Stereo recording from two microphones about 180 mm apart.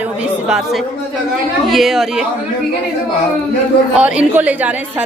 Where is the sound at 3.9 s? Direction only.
5° right (ahead or behind).